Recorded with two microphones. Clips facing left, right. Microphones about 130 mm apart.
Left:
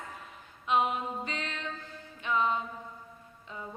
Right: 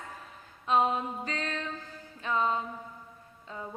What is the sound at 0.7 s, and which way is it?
A woman's voice, 35° right (ahead or behind).